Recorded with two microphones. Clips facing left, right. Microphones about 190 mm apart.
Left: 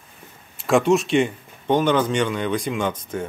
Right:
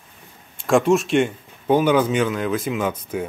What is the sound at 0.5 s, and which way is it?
Speech, centre (ahead or behind).